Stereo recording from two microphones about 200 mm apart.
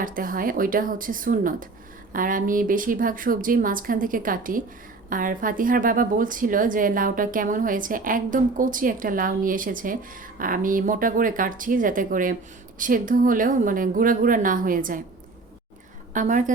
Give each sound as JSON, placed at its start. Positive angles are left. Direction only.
{"t": 0.0, "sound": "a woman's voice", "side_deg": -45}
{"t": 16.1, "sound": "speech", "side_deg": -40}